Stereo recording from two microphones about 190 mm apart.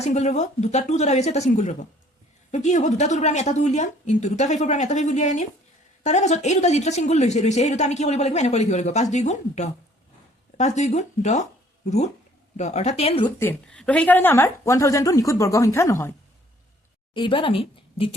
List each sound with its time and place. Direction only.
0.0 s speech: 35° left (ahead or behind)
12.5 s speech: 35° left (ahead or behind)
13.2 s a woman's voice: 10° left (ahead or behind)
17.2 s a woman's voice: 25° left (ahead or behind)